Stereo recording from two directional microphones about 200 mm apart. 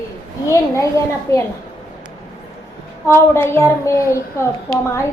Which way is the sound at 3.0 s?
10° left (ahead or behind).